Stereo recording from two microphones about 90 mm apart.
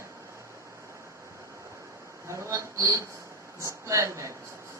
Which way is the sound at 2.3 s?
35° right (ahead or behind).